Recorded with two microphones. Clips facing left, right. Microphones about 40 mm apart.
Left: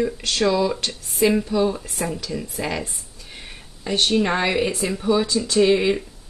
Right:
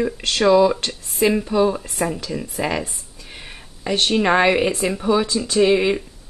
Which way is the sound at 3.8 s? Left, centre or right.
Right.